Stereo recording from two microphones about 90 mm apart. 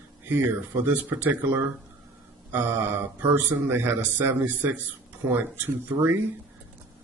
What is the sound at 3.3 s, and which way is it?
A man's voice, 20° right (ahead or behind).